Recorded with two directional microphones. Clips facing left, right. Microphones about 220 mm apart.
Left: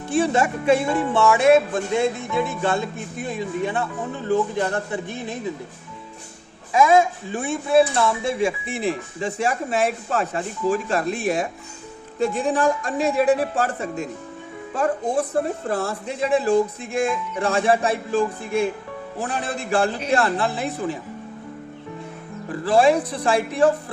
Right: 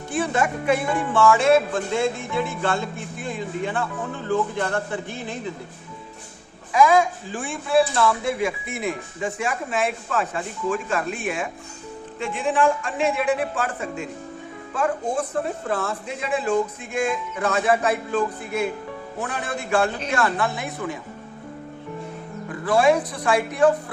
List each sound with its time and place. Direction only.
0.3 s speech: 25° left (ahead or behind)
6.7 s speech: 25° left (ahead or behind)
19.2 s speech: 30° left (ahead or behind)
22.6 s speech: 30° left (ahead or behind)